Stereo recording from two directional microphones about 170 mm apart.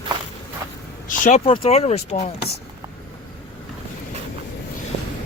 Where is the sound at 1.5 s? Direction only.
35° left (ahead or behind).